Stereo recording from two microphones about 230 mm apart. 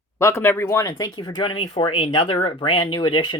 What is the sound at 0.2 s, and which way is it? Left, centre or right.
Speech, centre.